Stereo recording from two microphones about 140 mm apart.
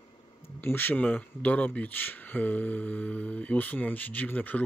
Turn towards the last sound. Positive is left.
turn(degrees=10)  # may be behind; listen again after turning